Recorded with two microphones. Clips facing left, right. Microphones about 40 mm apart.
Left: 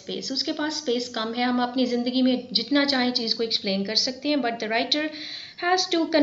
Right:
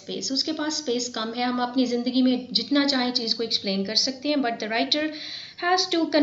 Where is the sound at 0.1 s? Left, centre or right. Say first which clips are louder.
Right 1 dB; centre.